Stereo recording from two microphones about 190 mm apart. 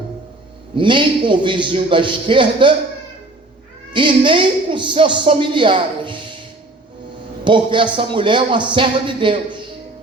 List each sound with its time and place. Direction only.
0.8 s a woman's voice: 25° right (ahead or behind)
3.9 s a woman's voice: 25° right (ahead or behind)
7.4 s a man's voice: 25° right (ahead or behind)